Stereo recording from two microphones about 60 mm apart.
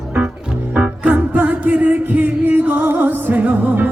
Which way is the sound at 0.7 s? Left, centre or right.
Right.